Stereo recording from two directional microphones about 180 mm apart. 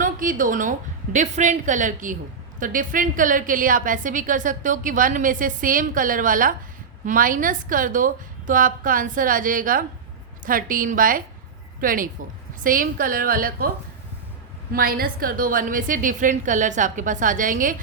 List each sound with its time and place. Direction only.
0.0 s a woman's voice: 50° right (ahead or behind)
14.7 s a woman's voice: 55° right (ahead or behind)